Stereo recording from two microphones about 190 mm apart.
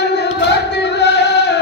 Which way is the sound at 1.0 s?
65° left (ahead or behind).